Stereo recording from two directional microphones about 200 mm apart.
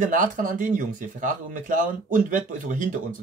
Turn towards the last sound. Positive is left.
turn(degrees=-40)  # may be behind; listen again after turning